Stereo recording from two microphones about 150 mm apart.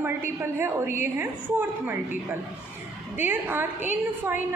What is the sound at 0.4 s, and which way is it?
Speech, 15° right (ahead or behind).